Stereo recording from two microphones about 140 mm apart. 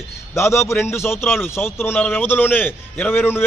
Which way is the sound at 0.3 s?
20° left (ahead or behind).